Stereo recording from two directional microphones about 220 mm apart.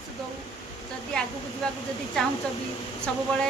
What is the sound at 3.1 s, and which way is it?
Speech, 5° left (ahead or behind).